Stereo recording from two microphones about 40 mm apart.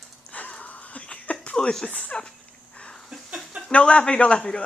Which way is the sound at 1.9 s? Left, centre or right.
Left.